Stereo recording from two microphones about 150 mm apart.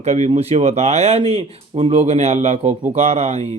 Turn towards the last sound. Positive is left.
turn(degrees=-45)  # may be behind; listen again after turning